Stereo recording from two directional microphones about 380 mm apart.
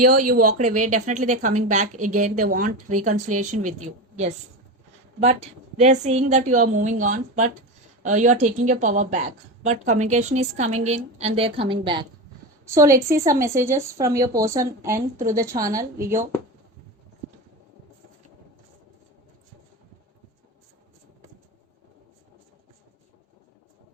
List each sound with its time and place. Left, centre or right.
0.1 s a woman's voice: right
0.9 s a woman's voice: centre
5.2 s a woman's voice: centre